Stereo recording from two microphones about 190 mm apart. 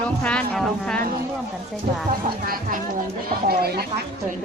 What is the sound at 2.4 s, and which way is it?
Speech, 50° right (ahead or behind).